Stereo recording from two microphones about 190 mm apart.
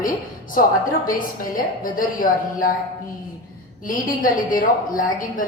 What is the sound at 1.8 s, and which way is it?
Speech, 45° left (ahead or behind).